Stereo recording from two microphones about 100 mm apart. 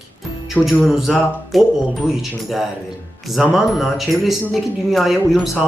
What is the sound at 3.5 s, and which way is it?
Speech, centre (ahead or behind).